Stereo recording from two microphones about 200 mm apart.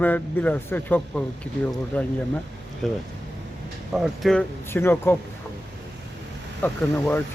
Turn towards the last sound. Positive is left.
turn(degrees=10)  # may be behind; listen again after turning